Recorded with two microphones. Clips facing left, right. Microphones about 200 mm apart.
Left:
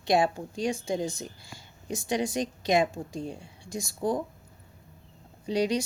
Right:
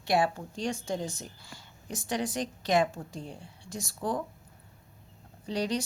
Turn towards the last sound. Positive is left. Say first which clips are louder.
# left 4 dB
turn(degrees=10)  # may be behind; listen again after turning